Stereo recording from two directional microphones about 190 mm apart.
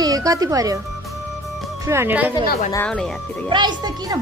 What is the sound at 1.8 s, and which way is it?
Speech, 10° right (ahead or behind).